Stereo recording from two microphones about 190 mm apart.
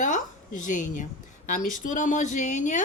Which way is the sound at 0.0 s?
40° left (ahead or behind).